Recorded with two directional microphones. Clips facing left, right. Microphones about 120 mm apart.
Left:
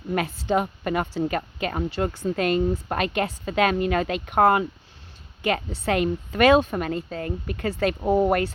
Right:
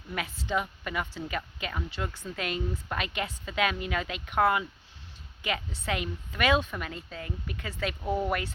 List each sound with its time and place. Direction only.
0.4 s speech: 45° left (ahead or behind)